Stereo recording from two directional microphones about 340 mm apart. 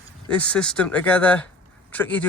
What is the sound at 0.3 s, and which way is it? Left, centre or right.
Speech, centre.